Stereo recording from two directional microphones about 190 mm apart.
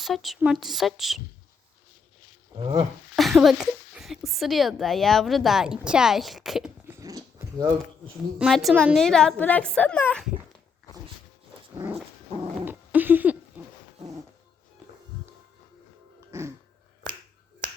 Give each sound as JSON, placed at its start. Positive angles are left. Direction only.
{"t": 0.0, "sound": "a woman's voice", "side_deg": 0}
{"t": 2.6, "sound": "stir", "side_deg": -25}
{"t": 3.2, "sound": "speech", "side_deg": 0}
{"t": 8.4, "sound": "a woman's voice", "side_deg": 0}
{"t": 12.4, "sound": "dog", "side_deg": -10}
{"t": 13.6, "sound": "owl", "side_deg": -10}
{"t": 14.0, "sound": "cat", "side_deg": -35}